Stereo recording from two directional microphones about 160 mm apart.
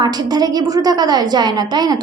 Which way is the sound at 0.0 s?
25° right (ahead or behind).